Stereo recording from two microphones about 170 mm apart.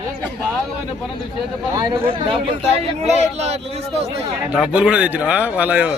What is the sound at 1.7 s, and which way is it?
Speech, 25° right (ahead or behind).